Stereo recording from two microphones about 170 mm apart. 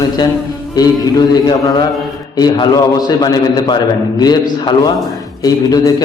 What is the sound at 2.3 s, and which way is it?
A man's voice, 25° left (ahead or behind).